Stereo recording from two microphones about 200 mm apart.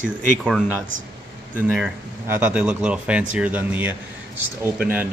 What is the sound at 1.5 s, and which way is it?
A man's voice, 5° right (ahead or behind).